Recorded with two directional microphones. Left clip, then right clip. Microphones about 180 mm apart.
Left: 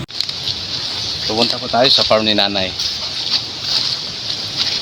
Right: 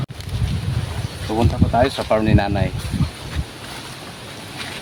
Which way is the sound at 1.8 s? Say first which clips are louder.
Left 7 dB; centre (ahead or behind).